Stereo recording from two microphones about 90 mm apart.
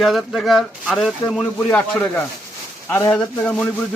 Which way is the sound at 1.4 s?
15° left (ahead or behind).